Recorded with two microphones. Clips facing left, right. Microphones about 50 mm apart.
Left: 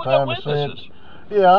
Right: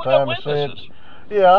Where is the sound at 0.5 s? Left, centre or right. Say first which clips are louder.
Right 1 dB; centre.